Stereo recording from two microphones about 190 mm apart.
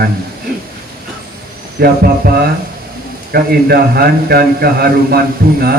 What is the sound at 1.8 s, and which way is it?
Speech, 55° right (ahead or behind).